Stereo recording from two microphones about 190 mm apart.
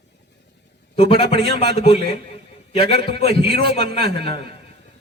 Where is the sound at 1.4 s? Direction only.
60° right (ahead or behind).